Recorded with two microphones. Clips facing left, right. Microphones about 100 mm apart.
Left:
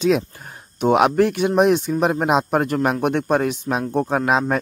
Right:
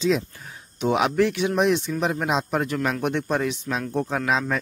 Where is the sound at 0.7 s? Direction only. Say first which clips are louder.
Left 5 dB; 50° left (ahead or behind).